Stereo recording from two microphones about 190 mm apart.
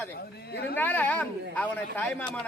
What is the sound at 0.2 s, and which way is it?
Speech, 60° left (ahead or behind).